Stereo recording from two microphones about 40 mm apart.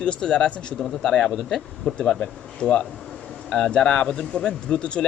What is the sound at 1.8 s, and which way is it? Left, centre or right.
Speech, left.